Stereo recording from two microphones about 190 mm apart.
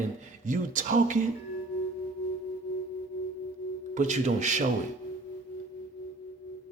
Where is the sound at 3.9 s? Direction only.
40° right (ahead or behind).